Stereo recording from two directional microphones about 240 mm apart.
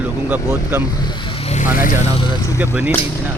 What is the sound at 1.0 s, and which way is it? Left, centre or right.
Vehicle, centre.